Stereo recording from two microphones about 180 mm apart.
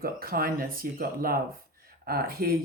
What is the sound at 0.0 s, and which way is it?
Speech, 55° right (ahead or behind).